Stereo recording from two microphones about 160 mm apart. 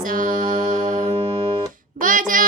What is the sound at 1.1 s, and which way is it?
Music, 35° right (ahead or behind).